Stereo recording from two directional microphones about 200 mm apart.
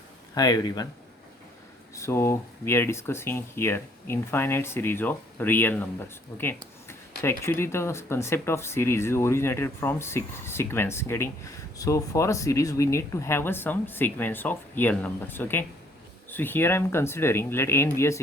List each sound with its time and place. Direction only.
0.3 s speech: 20° left (ahead or behind)
2.0 s speech: 15° left (ahead or behind)